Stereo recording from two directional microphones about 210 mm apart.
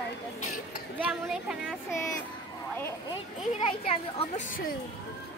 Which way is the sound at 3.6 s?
25° left (ahead or behind).